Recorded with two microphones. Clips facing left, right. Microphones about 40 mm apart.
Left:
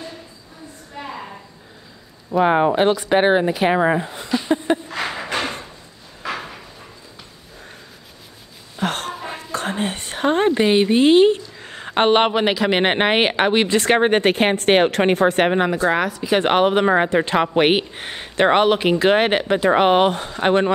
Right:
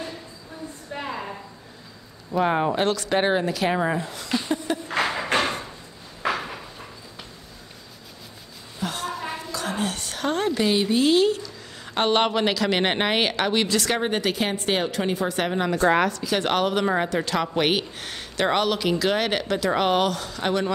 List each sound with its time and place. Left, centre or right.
2.3 s speech: left
5.0 s a sound: centre
8.7 s a sound: left
9.4 s speech: left
15.9 s speech: centre
16.3 s speech: left